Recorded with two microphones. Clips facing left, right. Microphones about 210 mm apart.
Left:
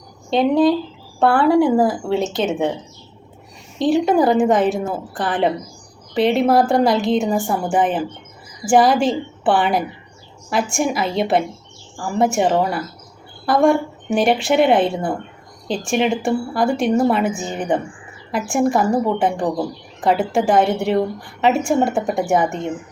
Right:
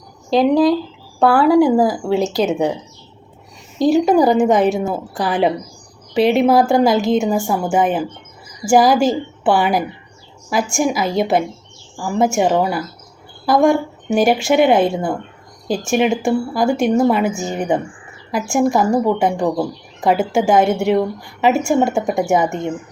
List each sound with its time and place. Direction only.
0.3 s a woman's voice: centre (ahead or behind)
3.8 s a woman's voice: 40° right (ahead or behind)
4.2 s a woman's voice: centre (ahead or behind)
20.3 s a woman's voice: centre (ahead or behind)